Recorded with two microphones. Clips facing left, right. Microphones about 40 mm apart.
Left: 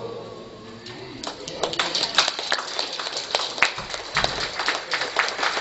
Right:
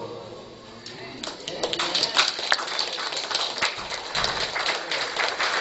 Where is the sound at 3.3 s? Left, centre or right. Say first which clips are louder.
Left 6 dB; left.